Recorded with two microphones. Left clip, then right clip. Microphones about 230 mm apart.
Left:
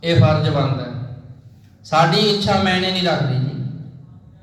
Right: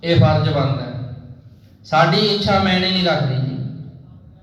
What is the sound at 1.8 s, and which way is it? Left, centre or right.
A man's voice, left.